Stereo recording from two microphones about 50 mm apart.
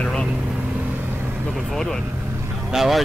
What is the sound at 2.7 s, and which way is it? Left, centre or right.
Speech, centre.